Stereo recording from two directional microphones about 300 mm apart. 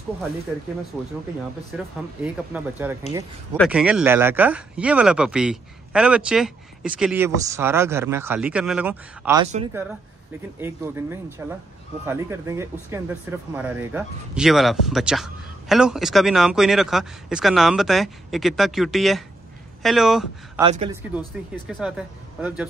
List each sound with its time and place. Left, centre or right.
0.9 s speech: centre
10.6 s speech: centre
20.6 s speech: centre
21.6 s speech: centre